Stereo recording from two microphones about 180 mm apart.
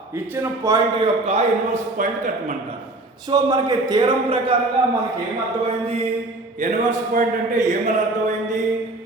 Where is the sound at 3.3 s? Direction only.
20° right (ahead or behind).